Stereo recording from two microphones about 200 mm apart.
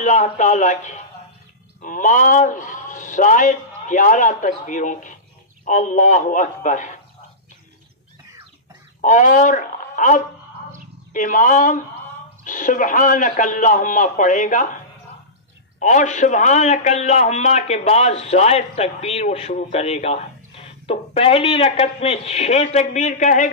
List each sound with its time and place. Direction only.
0.0 s a man's voice: 35° left (ahead or behind)
9.0 s a man's voice: 40° left (ahead or behind)
15.8 s a man's voice: 35° left (ahead or behind)